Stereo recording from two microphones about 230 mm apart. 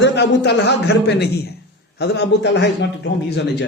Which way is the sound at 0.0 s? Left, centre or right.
Left.